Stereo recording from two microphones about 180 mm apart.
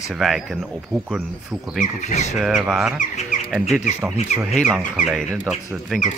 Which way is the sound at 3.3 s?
45° left (ahead or behind).